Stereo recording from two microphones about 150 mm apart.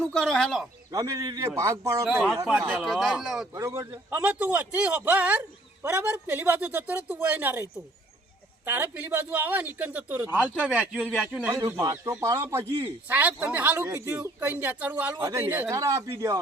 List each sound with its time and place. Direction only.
0.0 s speech: 5° left (ahead or behind)
0.9 s a man's voice: 25° right (ahead or behind)
2.0 s speech: 5° right (ahead or behind)
3.5 s speech: 20° right (ahead or behind)
8.6 s speech: 15° right (ahead or behind)
11.0 s speech: 5° left (ahead or behind)
11.6 s speech: 20° right (ahead or behind)
15.2 s a man's voice: 20° right (ahead or behind)